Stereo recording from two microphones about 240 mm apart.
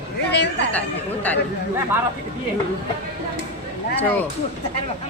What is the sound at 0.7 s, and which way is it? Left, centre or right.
Speech, centre.